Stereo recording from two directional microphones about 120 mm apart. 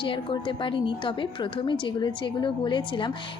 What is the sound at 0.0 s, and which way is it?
A woman's voice, 40° left (ahead or behind).